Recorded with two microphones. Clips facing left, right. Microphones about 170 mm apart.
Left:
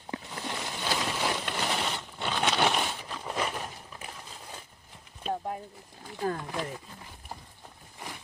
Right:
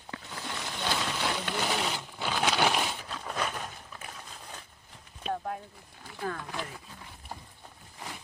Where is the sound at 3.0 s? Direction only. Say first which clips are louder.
Left 1 dB; 10° left (ahead or behind).